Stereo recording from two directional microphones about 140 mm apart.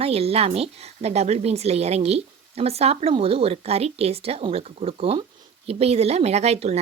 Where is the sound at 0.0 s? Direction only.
45° right (ahead or behind).